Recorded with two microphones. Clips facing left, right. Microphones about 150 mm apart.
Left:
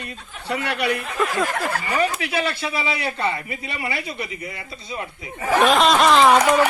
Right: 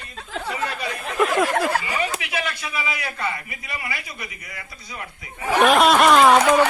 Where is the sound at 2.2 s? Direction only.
30° left (ahead or behind).